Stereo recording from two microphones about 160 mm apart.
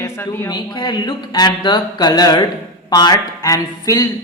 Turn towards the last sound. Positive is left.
turn(degrees=20)  # may be behind; listen again after turning